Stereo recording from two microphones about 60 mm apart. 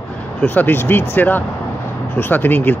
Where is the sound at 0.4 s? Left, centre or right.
Left.